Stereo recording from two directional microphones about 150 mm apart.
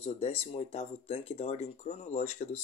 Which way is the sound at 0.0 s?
45° left (ahead or behind).